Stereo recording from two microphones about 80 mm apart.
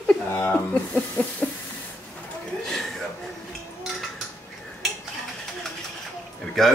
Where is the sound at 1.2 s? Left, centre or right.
Centre.